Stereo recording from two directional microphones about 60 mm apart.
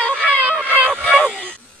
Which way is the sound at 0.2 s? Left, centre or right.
Right.